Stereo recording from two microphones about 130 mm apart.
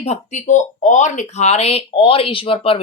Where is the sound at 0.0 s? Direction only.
60° left (ahead or behind).